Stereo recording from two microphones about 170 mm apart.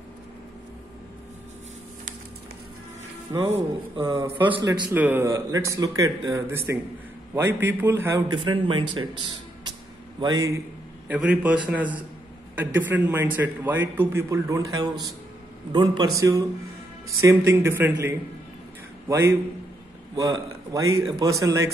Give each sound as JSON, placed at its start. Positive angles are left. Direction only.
{"t": 3.3, "sound": "speech", "side_deg": -20}
{"t": 4.9, "sound": "a man's voice", "side_deg": -10}
{"t": 8.4, "sound": "speech", "side_deg": -30}
{"t": 10.2, "sound": "speech", "side_deg": -20}
{"t": 11.1, "sound": "a man's voice", "side_deg": -10}